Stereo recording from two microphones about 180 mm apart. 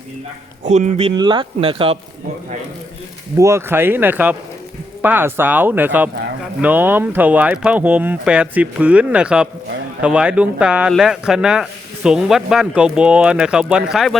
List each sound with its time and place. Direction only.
0.6 s speech: 40° right (ahead or behind)
1.1 s speech: 25° right (ahead or behind)
3.3 s speech: 15° right (ahead or behind); by 14.2 s centre (ahead or behind)